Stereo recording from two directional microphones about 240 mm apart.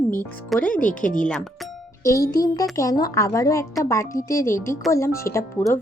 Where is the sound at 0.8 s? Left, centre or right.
Left.